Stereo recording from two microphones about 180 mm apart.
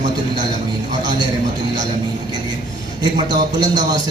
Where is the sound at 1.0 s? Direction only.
25° right (ahead or behind).